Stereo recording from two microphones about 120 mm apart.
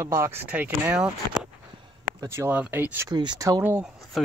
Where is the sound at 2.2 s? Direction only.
20° right (ahead or behind).